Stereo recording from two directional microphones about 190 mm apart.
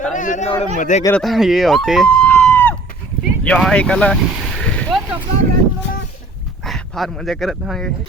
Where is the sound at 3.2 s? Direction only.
5° left (ahead or behind).